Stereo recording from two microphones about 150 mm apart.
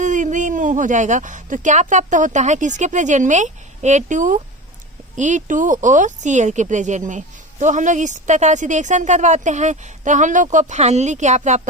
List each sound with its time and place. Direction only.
0.0 s speech: 55° right (ahead or behind)